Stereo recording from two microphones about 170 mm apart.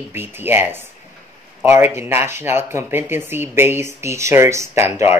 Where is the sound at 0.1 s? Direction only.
10° right (ahead or behind).